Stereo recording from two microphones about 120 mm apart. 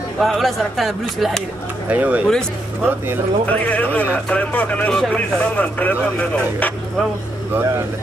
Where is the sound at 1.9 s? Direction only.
10° right (ahead or behind).